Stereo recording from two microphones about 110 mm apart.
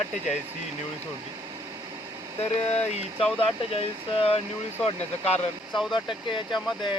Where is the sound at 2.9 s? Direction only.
60° left (ahead or behind).